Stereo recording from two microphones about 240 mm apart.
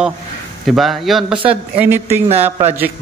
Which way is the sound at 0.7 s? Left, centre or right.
Centre.